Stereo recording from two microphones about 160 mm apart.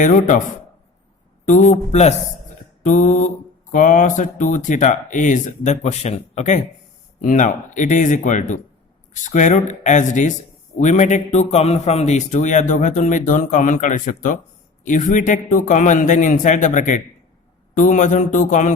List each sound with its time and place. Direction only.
0.0 s speech: 55° left (ahead or behind)
1.5 s speech: 50° left (ahead or behind)